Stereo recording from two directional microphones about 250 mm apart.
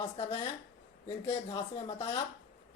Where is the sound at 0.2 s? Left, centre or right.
Left.